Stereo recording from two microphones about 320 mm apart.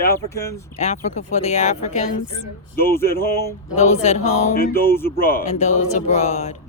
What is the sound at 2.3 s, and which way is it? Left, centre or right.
Speech, left.